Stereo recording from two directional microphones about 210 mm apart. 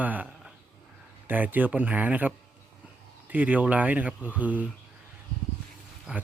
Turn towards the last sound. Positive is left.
turn(degrees=-5)  # may be behind; listen again after turning